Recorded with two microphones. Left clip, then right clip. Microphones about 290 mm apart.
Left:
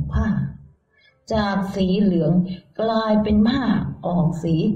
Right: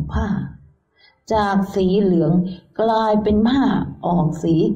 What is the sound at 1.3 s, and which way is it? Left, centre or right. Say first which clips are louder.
A woman's voice: right 4 dB; right.